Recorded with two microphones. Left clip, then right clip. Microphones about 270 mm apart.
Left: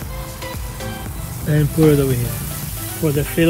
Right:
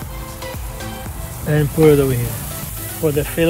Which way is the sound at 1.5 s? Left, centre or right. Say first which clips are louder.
Right 3 dB; right.